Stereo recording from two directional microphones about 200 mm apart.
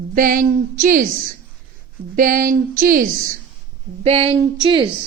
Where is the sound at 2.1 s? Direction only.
45° right (ahead or behind).